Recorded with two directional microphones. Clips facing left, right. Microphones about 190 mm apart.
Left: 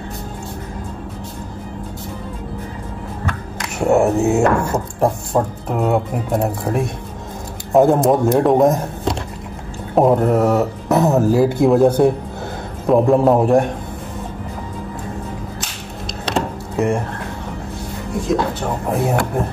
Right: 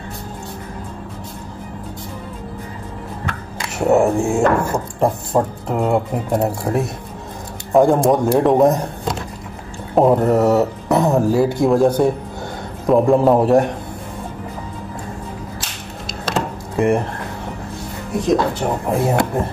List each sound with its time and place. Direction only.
3.6 s speech: 5° right (ahead or behind)
16.3 s a sound: centre (ahead or behind)
18.9 s speech: 5° left (ahead or behind)